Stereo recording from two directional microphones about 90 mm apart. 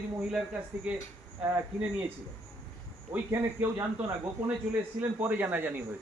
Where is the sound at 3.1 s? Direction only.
25° right (ahead or behind).